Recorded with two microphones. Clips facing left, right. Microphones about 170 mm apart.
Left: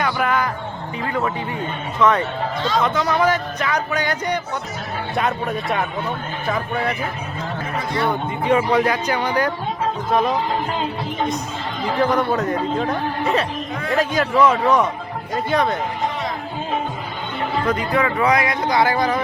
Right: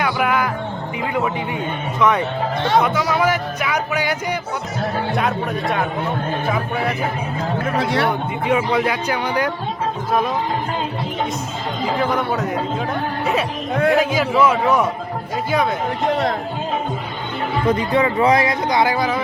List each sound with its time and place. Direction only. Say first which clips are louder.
0.0 s music: right 1 dB; 10° right (ahead or behind)
2.0 s music: even; 15° right (ahead or behind)
5.1 s speech: right 1 dB; centre (ahead or behind)
7.8 s speech: right 2 dB; 75° right (ahead or behind)
8.4 s music: left 1 dB; 10° right (ahead or behind)
10.1 s speech: left 1 dB; 5° right (ahead or behind)
11.9 s speech: left 4 dB; 5° right (ahead or behind)
17.7 s speech: right 4 dB; 25° right (ahead or behind); by 19.2 s 10° right (ahead or behind)